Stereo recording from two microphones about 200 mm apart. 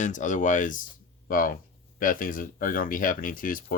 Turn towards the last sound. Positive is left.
turn(degrees=45)  # may be behind; listen again after turning